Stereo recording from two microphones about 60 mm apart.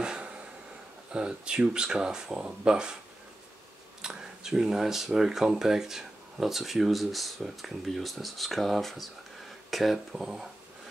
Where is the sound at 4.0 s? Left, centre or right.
Centre.